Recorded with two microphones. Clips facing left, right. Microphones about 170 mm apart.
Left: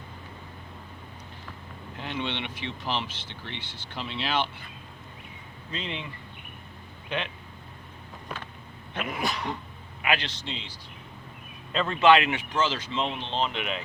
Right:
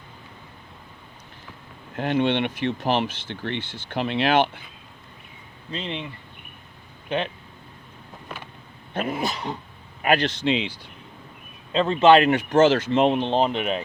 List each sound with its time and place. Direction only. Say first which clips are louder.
2.0 s speech: right 11 dB; 55° right (ahead or behind)
5.7 s speech: right 4 dB; 30° right (ahead or behind)
8.9 s dog: right 6 dB; 40° right (ahead or behind)
9.1 s speech: right 3 dB; 25° right (ahead or behind)
10.0 s speech: right 8 dB; 45° right (ahead or behind)
10.4 s speech: right 15 dB; 80° right
11.7 s speech: right 5 dB; 25° right (ahead or behind)
12.2 s speech: right 11 dB; 45° right (ahead or behind)